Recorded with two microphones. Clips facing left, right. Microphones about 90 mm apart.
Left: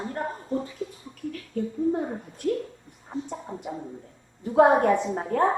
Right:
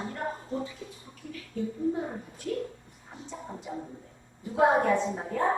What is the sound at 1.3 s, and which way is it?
Speech, 55° left (ahead or behind).